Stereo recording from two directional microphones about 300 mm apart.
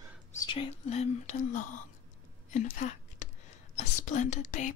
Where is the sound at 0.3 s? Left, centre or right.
Centre.